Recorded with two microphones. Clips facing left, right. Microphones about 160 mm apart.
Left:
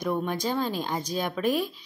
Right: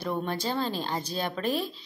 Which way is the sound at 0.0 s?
10° left (ahead or behind).